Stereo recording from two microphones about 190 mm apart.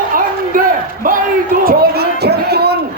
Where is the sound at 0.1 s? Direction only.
45° right (ahead or behind).